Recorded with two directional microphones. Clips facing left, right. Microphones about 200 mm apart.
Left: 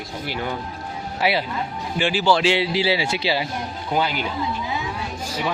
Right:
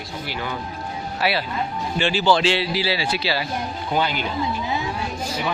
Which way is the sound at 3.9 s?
5° left (ahead or behind).